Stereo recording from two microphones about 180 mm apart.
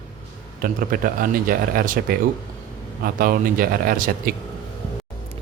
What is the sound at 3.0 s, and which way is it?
Speech, 50° right (ahead or behind).